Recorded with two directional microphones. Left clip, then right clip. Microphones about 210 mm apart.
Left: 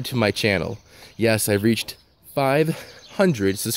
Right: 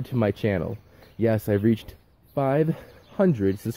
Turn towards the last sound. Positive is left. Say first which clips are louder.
# left 3 dB
turn(degrees=35)  # may be behind; listen again after turning